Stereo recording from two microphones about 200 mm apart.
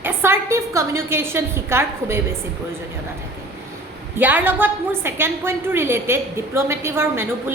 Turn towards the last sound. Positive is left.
turn(degrees=-10)  # may be behind; listen again after turning